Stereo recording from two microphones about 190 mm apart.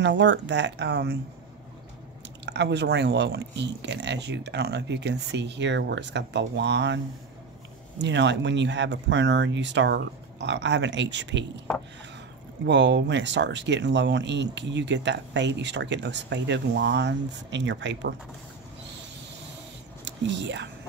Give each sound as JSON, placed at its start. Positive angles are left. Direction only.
{"t": 0.0, "sound": "speech", "side_deg": -70}
{"t": 2.4, "sound": "speech", "side_deg": -65}
{"t": 8.0, "sound": "speech", "side_deg": -70}
{"t": 12.6, "sound": "speech", "side_deg": -65}
{"t": 20.1, "sound": "speech", "side_deg": -70}